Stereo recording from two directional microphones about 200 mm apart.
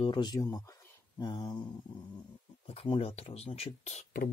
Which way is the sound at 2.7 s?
30° left (ahead or behind).